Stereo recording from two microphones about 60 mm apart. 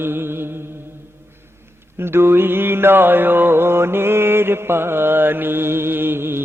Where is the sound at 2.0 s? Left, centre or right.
Right.